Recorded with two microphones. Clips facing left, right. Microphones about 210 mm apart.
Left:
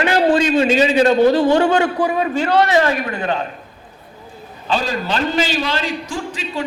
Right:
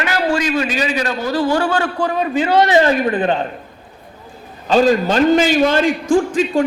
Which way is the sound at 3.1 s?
35° right (ahead or behind).